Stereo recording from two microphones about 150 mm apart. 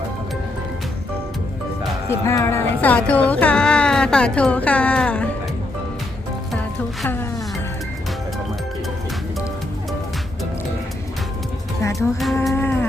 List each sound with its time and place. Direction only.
2.0 s music: 20° left (ahead or behind)
6.5 s music: centre (ahead or behind)
11.8 s music: 20° left (ahead or behind)
12.5 s a sound: 15° left (ahead or behind)